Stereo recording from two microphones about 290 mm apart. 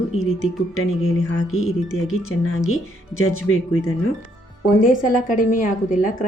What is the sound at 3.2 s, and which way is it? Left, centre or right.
Speech, left.